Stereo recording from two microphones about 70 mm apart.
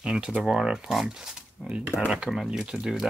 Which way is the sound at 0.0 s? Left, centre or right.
Centre.